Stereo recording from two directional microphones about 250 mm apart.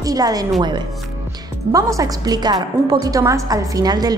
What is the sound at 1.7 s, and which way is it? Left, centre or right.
A woman's voice, centre.